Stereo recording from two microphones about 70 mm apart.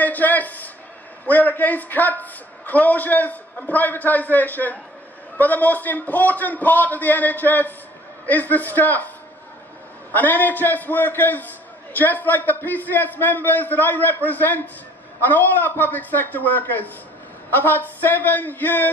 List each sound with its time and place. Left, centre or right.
0.0 s a sound: left
1.2 s a man's voice: left
10.1 s a man's voice: left